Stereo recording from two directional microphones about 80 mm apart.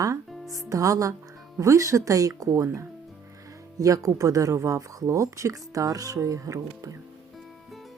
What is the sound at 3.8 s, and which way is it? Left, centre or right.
Speech, right.